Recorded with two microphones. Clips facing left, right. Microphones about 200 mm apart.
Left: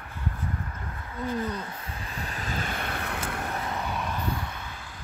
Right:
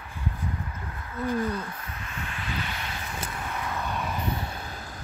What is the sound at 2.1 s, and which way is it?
Vehicle, 35° left (ahead or behind).